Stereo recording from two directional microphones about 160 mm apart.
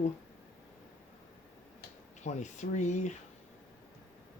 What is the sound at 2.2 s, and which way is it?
Speech, 50° left (ahead or behind).